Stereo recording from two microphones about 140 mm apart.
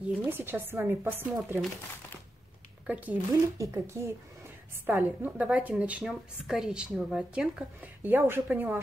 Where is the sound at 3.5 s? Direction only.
20° right (ahead or behind).